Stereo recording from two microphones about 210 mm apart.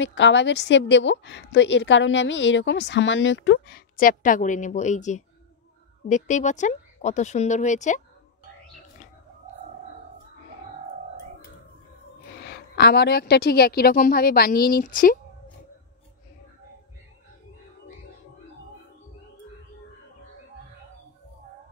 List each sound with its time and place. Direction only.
0.0 s a woman's voice: 60° left (ahead or behind); by 8.0 s 35° left (ahead or behind)
12.4 s a woman's voice: 50° left (ahead or behind)